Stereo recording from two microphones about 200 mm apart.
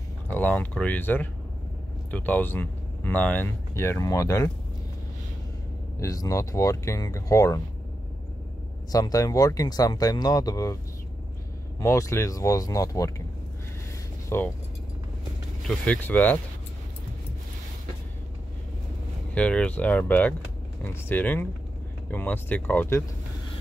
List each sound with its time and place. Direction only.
0.3 s speech: 10° left (ahead or behind)
5.9 s speech: 15° left (ahead or behind)
8.9 s speech: 20° left (ahead or behind)
11.8 s speech: 15° left (ahead or behind)
14.3 s speech: 15° left (ahead or behind)
15.6 s speech: 5° left (ahead or behind)
19.3 s speech: 5° left (ahead or behind)